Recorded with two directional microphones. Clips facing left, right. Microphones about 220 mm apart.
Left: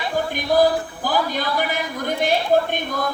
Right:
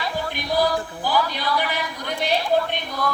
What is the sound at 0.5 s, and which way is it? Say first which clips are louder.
Speech: left 5 dB; 45° left (ahead or behind).